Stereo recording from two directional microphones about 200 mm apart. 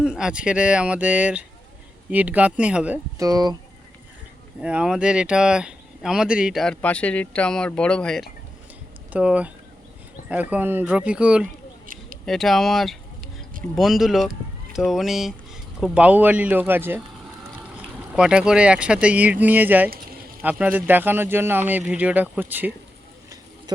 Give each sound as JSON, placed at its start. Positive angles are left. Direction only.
{"t": 0.0, "sound": "speech", "side_deg": -5}
{"t": 3.2, "sound": "speech", "side_deg": -15}
{"t": 4.6, "sound": "speech", "side_deg": -5}
{"t": 9.1, "sound": "speech", "side_deg": -5}
{"t": 10.5, "sound": "speech", "side_deg": -10}
{"t": 13.2, "sound": "a sound", "side_deg": -45}
{"t": 13.7, "sound": "speech", "side_deg": 0}
{"t": 18.1, "sound": "speech", "side_deg": -5}
{"t": 23.7, "sound": "speech", "side_deg": -20}